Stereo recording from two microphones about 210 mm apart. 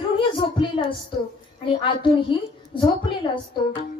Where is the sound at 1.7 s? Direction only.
25° left (ahead or behind).